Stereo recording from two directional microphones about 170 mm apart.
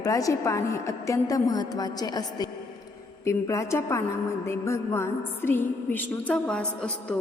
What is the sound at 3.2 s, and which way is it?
Music, 15° left (ahead or behind).